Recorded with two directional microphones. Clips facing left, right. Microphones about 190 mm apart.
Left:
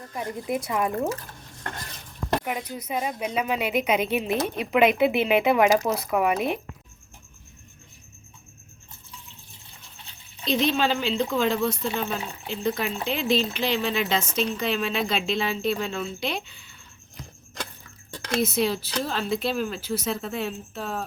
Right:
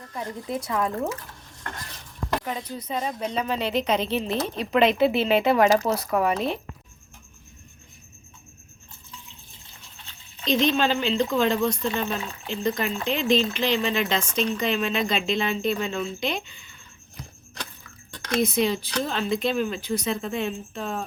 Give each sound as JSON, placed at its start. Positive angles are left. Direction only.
{"t": 0.1, "sound": "a woman's voice", "side_deg": 15}
{"t": 2.4, "sound": "a woman's voice", "side_deg": 15}
{"t": 10.4, "sound": "speech", "side_deg": 5}
{"t": 18.3, "sound": "speech", "side_deg": 5}